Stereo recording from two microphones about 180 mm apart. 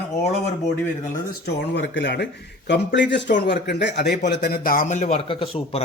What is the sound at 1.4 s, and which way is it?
A man's voice, 75° left (ahead or behind).